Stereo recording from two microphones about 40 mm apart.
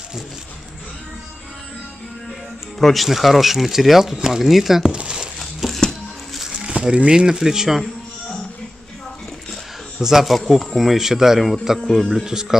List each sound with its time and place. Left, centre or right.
2.8 s speech: centre
4.9 s speech: right
5.6 s a sound: centre
6.5 s speech: right
10.0 s speech: centre
10.3 s speech: centre